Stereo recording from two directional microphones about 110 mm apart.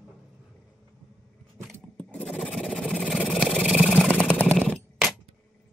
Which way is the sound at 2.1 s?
5° left (ahead or behind).